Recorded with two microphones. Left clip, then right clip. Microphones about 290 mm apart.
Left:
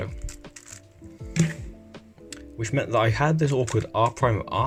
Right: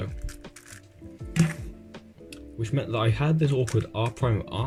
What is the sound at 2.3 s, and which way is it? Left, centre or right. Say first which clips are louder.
Speech: left 4 dB; left.